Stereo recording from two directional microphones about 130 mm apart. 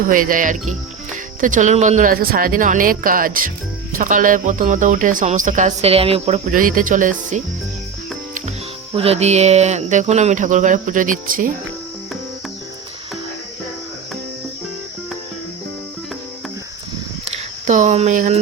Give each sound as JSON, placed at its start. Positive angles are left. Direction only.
{"t": 0.0, "sound": "speech", "side_deg": -90}
{"t": 1.4, "sound": "speech", "side_deg": -85}
{"t": 6.5, "sound": "speech", "side_deg": -90}
{"t": 9.0, "sound": "speech", "side_deg": -55}
{"t": 17.3, "sound": "a sound", "side_deg": -70}